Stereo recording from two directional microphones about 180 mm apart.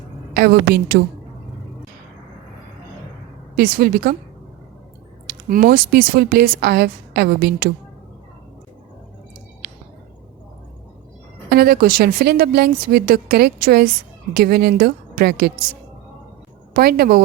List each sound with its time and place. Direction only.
0.3 s speech: 55° right (ahead or behind)
3.5 s speech: 55° right (ahead or behind)
5.2 s speech: 55° right (ahead or behind)
11.4 s speech: 60° right (ahead or behind)
16.7 s speech: 60° right (ahead or behind)